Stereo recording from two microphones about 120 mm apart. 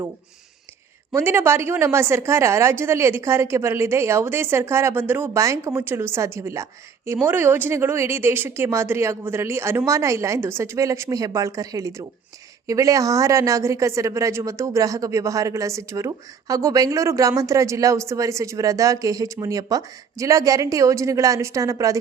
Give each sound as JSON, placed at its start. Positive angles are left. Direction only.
{"t": 1.1, "sound": "a woman's voice", "side_deg": -20}